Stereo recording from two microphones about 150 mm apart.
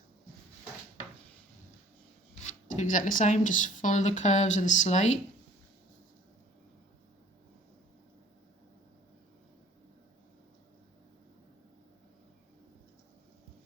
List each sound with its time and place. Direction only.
2.3 s speech: 50° left (ahead or behind)